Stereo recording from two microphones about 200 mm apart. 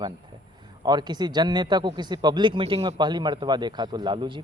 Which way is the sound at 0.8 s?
20° right (ahead or behind).